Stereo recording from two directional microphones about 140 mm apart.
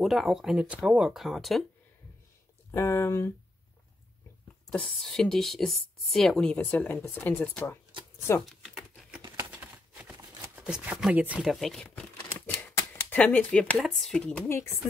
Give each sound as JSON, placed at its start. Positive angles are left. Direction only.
{"t": 0.0, "sound": "speech", "side_deg": 0}
{"t": 2.7, "sound": "speech", "side_deg": 20}
{"t": 4.6, "sound": "speech", "side_deg": 5}
{"t": 8.6, "sound": "a sound", "side_deg": 0}
{"t": 10.5, "sound": "speech", "side_deg": -10}
{"t": 12.6, "sound": "speech", "side_deg": 15}
{"t": 14.5, "sound": "speech", "side_deg": 20}